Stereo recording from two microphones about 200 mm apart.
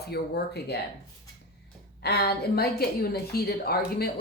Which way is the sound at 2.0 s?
50° left (ahead or behind).